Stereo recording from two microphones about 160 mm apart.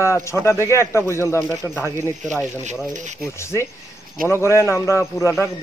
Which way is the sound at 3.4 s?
15° left (ahead or behind).